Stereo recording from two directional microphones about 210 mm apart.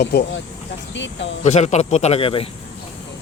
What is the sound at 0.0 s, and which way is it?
Speech, 50° left (ahead or behind).